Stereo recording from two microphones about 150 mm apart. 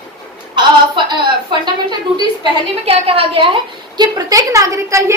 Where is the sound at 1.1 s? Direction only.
30° right (ahead or behind).